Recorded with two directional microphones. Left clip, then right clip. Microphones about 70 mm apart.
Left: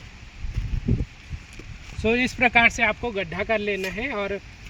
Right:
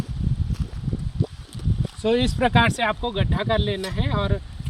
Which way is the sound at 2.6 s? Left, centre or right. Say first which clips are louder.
Left 2 dB; right.